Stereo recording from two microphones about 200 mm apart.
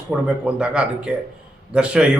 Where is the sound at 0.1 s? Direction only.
5° right (ahead or behind).